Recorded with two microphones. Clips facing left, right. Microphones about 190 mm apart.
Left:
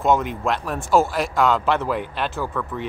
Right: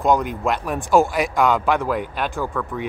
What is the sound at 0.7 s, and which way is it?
Speech, 15° right (ahead or behind).